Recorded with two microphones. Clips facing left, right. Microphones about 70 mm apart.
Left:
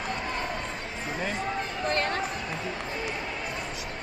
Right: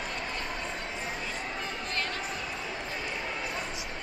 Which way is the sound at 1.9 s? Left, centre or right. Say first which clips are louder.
Left 9 dB; left.